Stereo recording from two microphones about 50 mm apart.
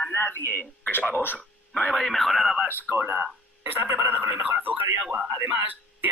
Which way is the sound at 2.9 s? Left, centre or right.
Right.